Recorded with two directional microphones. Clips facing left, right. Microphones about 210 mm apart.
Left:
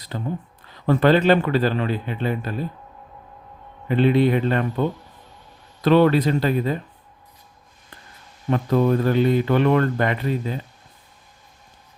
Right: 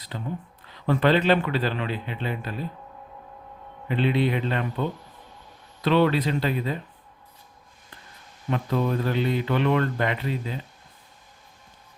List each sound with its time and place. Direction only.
0.1 s speech: 40° left (ahead or behind)
3.8 s speech: 45° left (ahead or behind)
8.4 s speech: 45° left (ahead or behind)